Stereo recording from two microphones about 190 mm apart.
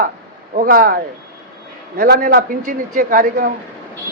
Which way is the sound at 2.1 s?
55° right (ahead or behind).